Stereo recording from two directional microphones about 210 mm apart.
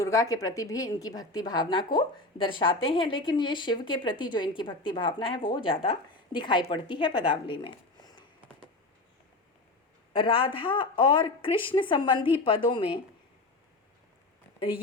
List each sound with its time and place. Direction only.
0.0 s a woman's voice: 15° left (ahead or behind)
10.1 s speech: 25° left (ahead or behind)